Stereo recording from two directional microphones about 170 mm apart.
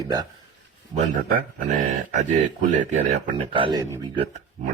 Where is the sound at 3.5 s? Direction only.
30° right (ahead or behind).